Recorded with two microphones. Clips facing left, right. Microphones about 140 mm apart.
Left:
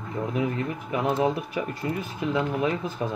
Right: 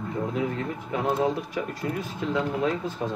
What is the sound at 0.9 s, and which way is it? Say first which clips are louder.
Speech: left 1 dB; 15° left (ahead or behind).